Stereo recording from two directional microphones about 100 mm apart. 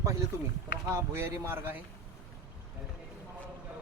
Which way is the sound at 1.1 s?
25° right (ahead or behind).